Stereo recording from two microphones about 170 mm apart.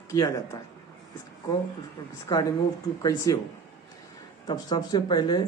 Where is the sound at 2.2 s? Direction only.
20° left (ahead or behind).